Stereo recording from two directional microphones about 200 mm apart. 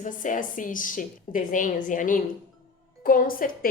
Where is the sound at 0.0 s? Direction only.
40° left (ahead or behind).